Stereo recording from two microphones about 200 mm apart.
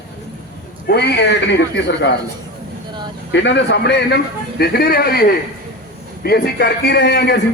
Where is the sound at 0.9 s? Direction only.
55° left (ahead or behind).